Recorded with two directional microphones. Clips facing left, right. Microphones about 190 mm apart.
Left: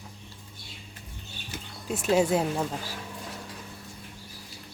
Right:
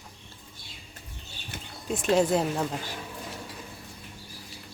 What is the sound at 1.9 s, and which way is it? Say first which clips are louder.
Speech: even; 5° left (ahead or behind).